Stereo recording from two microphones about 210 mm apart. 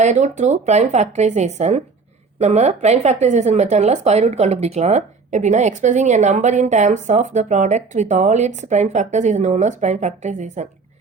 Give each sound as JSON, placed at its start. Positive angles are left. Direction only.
{"t": 0.0, "sound": "a woman's voice", "side_deg": -35}